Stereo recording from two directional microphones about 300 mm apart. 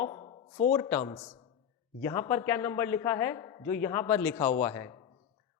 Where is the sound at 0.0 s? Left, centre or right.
Centre.